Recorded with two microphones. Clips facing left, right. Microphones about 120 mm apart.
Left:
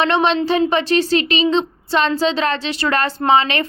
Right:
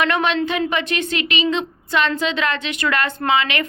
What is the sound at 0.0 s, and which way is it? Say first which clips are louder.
Speech: left 3 dB; 30° left (ahead or behind).